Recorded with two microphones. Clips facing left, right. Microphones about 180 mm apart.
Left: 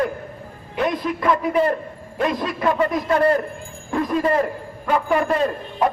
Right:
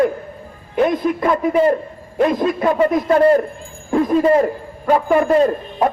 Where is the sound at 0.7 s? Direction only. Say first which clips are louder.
Right 6 dB; 50° right (ahead or behind).